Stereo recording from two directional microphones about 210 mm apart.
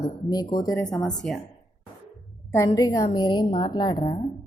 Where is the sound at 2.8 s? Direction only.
15° left (ahead or behind).